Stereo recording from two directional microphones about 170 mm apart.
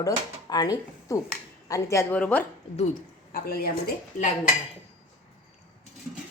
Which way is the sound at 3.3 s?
60° left (ahead or behind).